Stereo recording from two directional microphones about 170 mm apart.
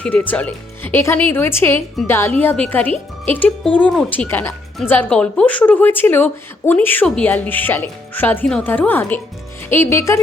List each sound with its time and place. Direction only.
0.0 s a woman's voice: 10° left (ahead or behind)